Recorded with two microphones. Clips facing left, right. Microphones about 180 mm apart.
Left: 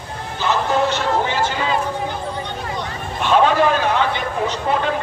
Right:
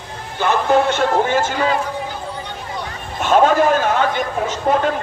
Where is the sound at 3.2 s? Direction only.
45° right (ahead or behind).